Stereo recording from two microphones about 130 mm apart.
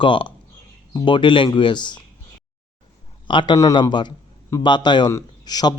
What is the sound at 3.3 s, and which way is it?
A man's voice, 35° left (ahead or behind).